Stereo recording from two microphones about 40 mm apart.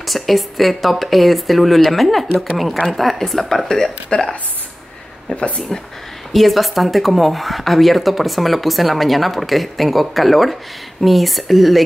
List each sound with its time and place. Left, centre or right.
0.0 s speech: centre
5.3 s speech: left
5.7 s speech: centre